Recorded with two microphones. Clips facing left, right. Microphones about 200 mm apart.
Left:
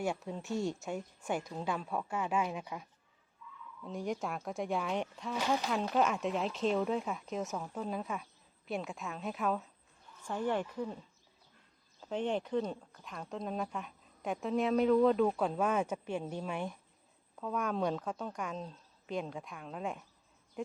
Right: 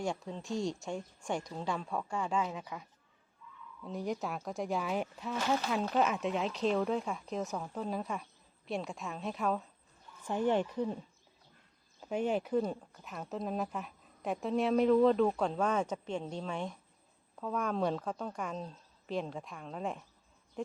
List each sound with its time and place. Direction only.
0.0 s speech: 5° left (ahead or behind)
3.8 s speech: centre (ahead or behind)
10.2 s speech: 20° right (ahead or behind)
11.9 s speech: 10° right (ahead or behind)